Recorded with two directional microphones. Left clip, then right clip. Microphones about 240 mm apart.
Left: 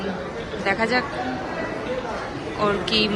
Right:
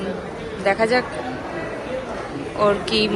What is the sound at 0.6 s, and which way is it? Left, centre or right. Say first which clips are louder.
Speech: right 4 dB; centre.